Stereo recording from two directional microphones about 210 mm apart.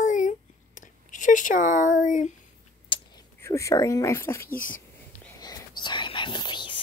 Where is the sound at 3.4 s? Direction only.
15° left (ahead or behind).